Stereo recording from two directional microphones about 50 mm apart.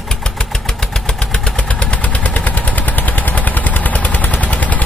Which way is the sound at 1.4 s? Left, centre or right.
Left.